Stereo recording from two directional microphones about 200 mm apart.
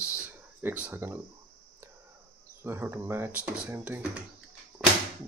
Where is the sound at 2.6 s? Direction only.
10° right (ahead or behind).